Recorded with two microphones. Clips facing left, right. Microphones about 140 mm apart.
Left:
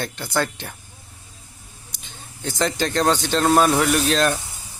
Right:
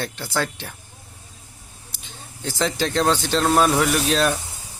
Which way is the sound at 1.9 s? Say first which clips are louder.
Right 1 dB; centre (ahead or behind).